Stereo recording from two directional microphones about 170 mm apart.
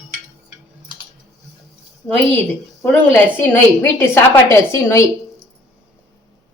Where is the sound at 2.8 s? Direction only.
10° left (ahead or behind).